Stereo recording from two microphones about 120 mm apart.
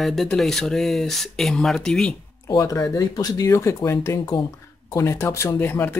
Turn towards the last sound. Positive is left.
turn(degrees=15)  # may be behind; listen again after turning